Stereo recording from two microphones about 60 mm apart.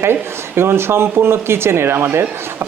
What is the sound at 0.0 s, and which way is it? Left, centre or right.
A man's voice, right.